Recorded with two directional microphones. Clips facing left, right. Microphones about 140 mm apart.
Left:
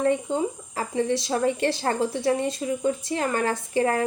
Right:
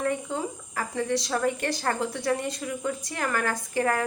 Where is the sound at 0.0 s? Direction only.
25° left (ahead or behind).